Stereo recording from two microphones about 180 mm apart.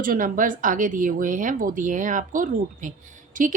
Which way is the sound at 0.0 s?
50° right (ahead or behind).